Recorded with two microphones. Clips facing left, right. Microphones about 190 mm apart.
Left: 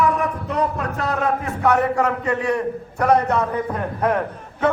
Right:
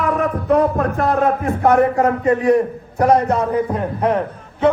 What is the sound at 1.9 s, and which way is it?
A man's voice, 35° right (ahead or behind).